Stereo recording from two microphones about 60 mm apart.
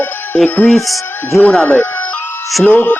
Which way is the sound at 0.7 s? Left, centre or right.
Centre.